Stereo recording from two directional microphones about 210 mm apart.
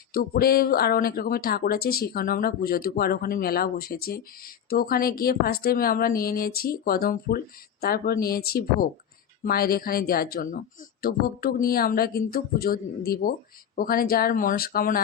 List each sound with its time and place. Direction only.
0.1 s speech: 45° left (ahead or behind)